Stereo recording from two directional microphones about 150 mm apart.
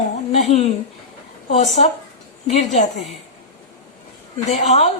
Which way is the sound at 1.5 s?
50° left (ahead or behind).